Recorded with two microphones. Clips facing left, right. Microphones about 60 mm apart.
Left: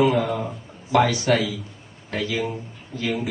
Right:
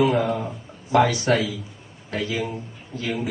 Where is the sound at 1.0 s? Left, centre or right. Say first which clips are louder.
Right 1 dB; right.